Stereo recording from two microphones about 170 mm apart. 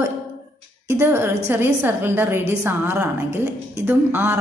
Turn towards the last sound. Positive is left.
turn(degrees=-10)  # may be behind; listen again after turning